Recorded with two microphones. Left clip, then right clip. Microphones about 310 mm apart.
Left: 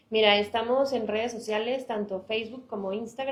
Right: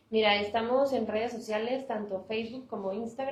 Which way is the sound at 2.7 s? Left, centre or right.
Left.